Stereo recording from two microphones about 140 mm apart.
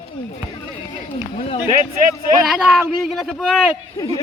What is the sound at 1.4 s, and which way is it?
Speech, 40° left (ahead or behind).